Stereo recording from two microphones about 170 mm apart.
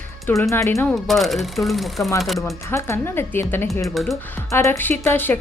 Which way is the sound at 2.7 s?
15° left (ahead or behind).